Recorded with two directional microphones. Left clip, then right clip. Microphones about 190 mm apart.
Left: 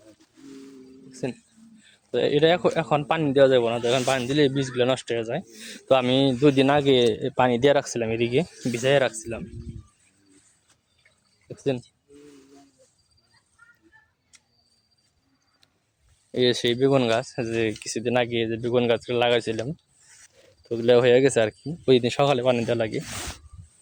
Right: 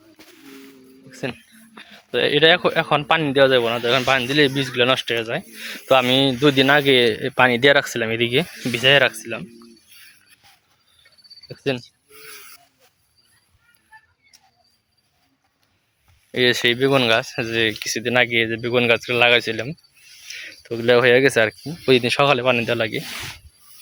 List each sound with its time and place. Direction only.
1.1 s a man's voice: centre (ahead or behind)
11.4 s cricket: centre (ahead or behind)
16.3 s a man's voice: centre (ahead or behind)
23.0 s speech: 35° left (ahead or behind)